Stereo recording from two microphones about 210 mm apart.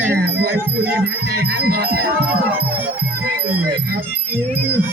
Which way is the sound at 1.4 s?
45° right (ahead or behind).